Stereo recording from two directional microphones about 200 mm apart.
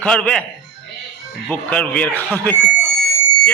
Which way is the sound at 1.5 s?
5° left (ahead or behind).